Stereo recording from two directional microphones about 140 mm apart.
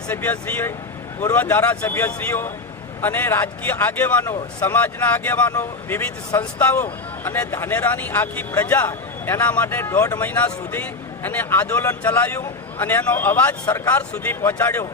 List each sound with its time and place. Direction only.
0.1 s speech: 15° left (ahead or behind)